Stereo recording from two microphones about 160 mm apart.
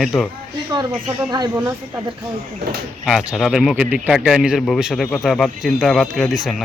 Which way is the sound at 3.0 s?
5° right (ahead or behind).